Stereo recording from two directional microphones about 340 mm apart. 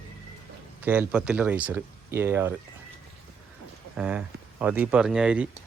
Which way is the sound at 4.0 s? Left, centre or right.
Centre.